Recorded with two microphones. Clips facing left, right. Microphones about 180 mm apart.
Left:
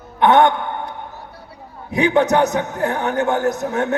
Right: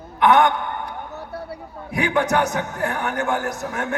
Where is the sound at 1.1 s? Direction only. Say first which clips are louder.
Right 6 dB; 65° right (ahead or behind).